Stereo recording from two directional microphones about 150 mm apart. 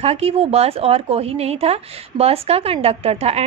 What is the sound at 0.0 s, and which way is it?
A woman's voice, 40° right (ahead or behind).